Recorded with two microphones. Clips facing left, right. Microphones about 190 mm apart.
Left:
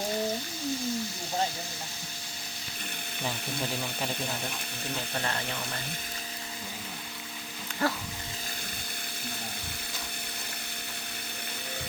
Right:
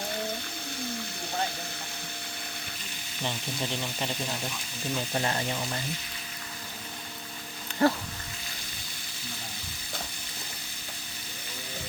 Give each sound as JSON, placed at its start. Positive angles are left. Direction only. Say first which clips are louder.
{"t": 3.2, "sound": "speech", "louder": "right 1 dB", "side_deg": 5}
{"t": 5.1, "sound": "speech", "louder": "right 3 dB", "side_deg": -20}
{"t": 7.8, "sound": "speech", "louder": "right 6 dB", "side_deg": -30}